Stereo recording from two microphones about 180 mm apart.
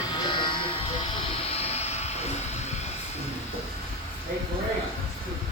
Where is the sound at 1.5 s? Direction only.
35° left (ahead or behind).